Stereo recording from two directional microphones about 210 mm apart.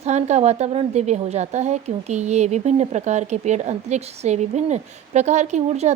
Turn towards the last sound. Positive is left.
turn(degrees=-35)  # may be behind; listen again after turning